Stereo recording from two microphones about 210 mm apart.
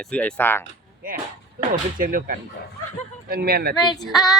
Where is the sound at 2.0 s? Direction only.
40° right (ahead or behind).